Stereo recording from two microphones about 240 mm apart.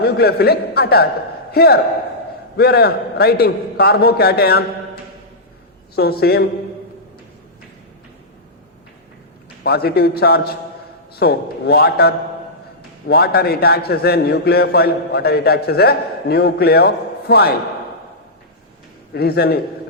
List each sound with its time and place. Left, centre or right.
0.0 s a man's voice: left
6.0 s a man's voice: left
9.6 s a man's voice: left
19.1 s a man's voice: left